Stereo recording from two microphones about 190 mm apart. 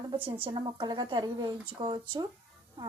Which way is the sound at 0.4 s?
25° right (ahead or behind).